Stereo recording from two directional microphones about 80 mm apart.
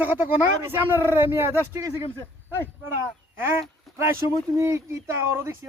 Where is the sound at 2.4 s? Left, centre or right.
Left.